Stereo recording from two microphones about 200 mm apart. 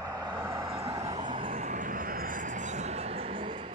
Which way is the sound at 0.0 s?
20° right (ahead or behind).